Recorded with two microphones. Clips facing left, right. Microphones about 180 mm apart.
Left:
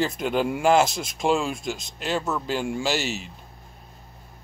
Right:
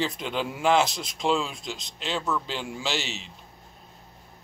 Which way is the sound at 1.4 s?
50° left (ahead or behind).